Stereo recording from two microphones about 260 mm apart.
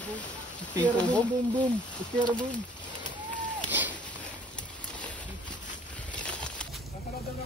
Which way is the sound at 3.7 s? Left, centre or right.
Centre.